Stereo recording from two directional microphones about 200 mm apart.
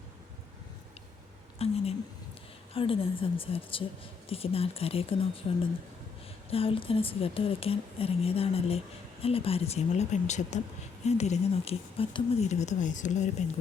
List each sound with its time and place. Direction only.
1.5 s a woman's voice: 30° left (ahead or behind)